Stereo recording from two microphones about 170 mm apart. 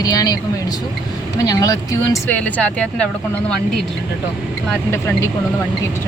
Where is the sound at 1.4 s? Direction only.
20° left (ahead or behind).